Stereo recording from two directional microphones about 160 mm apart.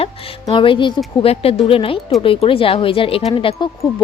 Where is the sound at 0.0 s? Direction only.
35° left (ahead or behind).